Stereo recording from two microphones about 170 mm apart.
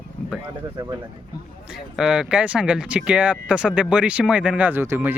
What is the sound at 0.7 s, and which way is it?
Speech, 20° right (ahead or behind).